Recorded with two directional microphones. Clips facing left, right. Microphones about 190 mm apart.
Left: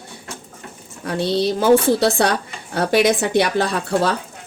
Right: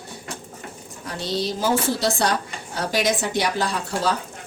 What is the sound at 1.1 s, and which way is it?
Speech, 60° left (ahead or behind).